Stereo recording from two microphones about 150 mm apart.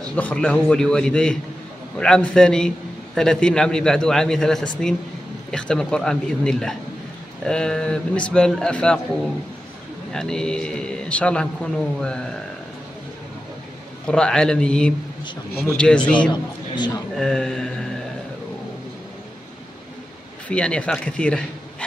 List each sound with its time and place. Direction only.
0.1 s a man's voice: 10° left (ahead or behind)
10.1 s a man's voice: 5° left (ahead or behind)
14.0 s a man's voice: 5° left (ahead or behind)
16.1 s a man's voice: 30° left (ahead or behind)
17.1 s a man's voice: 5° left (ahead or behind)
20.4 s a man's voice: 5° left (ahead or behind)